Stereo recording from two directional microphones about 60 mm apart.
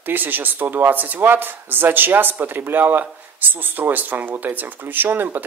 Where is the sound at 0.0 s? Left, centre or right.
Right.